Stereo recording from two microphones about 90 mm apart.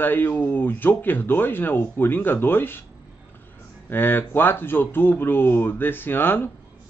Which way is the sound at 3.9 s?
25° left (ahead or behind).